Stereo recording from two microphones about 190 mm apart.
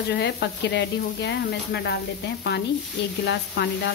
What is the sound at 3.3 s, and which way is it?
Speech, 65° left (ahead or behind).